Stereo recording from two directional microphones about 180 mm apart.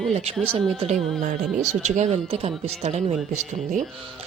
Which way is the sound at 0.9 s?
Centre (ahead or behind).